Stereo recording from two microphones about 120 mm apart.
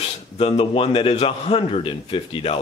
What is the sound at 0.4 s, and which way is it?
A man's voice, 50° left (ahead or behind).